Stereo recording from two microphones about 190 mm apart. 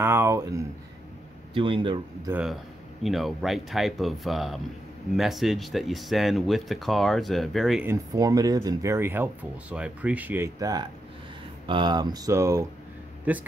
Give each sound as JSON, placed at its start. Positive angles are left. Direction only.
{"t": 0.0, "sound": "speech", "side_deg": -15}
{"t": 1.5, "sound": "speech", "side_deg": -25}
{"t": 3.0, "sound": "speech", "side_deg": 0}
{"t": 7.8, "sound": "speech", "side_deg": -15}